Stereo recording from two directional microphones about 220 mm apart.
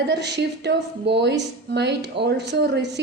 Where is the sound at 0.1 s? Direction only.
50° right (ahead or behind).